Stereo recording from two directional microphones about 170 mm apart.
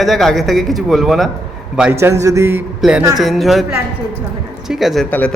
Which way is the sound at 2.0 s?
20° right (ahead or behind).